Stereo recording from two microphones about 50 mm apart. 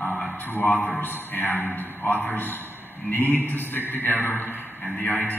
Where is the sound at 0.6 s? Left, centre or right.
Left.